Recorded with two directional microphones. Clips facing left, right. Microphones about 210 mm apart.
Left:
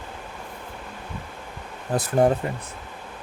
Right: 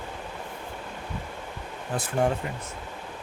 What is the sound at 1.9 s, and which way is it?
Speech, 40° left (ahead or behind).